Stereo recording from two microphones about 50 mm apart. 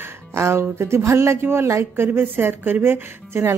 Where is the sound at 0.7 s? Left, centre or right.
Right.